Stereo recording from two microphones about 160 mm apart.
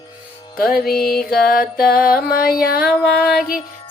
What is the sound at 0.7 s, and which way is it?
Music, 70° left (ahead or behind).